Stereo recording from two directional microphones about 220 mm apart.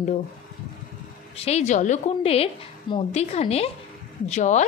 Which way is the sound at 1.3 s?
30° left (ahead or behind).